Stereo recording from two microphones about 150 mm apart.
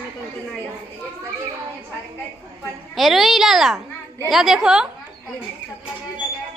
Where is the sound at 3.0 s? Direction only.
Centre (ahead or behind).